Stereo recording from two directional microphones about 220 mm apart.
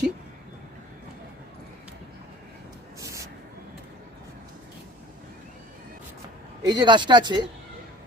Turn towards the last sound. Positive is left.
turn(degrees=-20)  # may be behind; listen again after turning